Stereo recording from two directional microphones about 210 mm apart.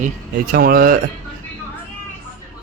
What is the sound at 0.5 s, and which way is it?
Speech, 45° right (ahead or behind).